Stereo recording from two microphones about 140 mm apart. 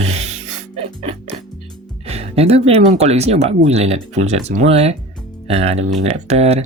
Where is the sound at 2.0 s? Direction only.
50° right (ahead or behind).